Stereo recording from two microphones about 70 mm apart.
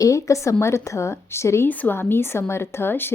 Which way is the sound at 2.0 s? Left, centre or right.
Left.